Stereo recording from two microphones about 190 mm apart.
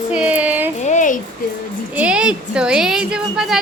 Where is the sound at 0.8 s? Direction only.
40° left (ahead or behind).